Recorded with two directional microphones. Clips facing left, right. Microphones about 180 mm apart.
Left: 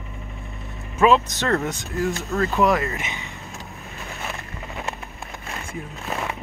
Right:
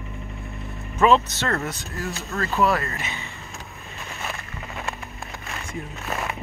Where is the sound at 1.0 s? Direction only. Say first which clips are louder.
Left 1 dB; 5° left (ahead or behind).